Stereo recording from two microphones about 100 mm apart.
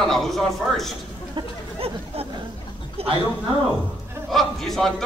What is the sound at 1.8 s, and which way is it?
A man's voice, 75° right (ahead or behind).